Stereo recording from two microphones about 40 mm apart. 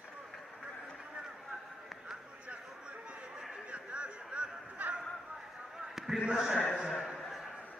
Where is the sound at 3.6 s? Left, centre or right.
Right.